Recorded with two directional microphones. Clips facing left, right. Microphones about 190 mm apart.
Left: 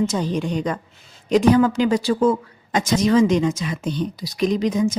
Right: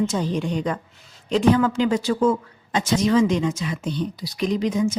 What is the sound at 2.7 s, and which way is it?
A woman's voice, 45° left (ahead or behind).